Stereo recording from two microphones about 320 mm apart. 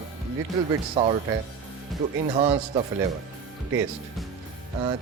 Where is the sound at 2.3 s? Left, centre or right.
Centre.